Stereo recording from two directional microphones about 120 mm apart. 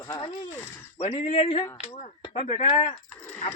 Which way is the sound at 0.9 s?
55° left (ahead or behind).